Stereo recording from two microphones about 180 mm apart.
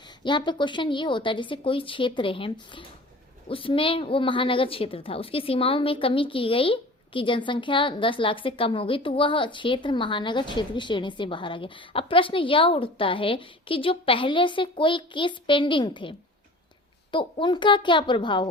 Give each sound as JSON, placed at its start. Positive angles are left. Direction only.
{"t": 0.2, "sound": "a woman's voice", "side_deg": 25}